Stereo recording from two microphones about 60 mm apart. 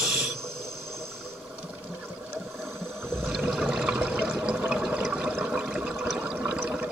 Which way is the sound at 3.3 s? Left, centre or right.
Centre.